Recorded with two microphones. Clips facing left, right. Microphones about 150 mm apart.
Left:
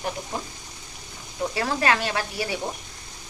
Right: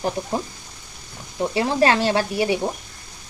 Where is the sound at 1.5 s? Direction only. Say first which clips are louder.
Right 6 dB; 25° right (ahead or behind).